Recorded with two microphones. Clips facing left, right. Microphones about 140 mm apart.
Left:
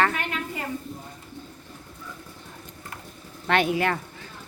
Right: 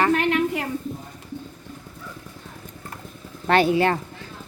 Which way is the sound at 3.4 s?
35° right (ahead or behind).